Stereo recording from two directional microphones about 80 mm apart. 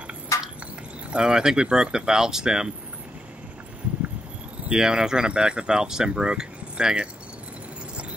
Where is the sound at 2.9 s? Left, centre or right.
Centre.